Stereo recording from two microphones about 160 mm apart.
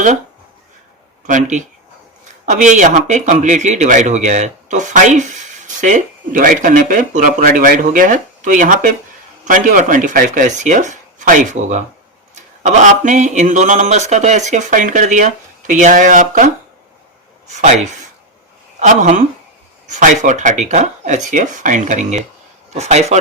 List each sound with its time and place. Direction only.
1.3 s speech: 50° right (ahead or behind)
17.5 s speech: 45° right (ahead or behind)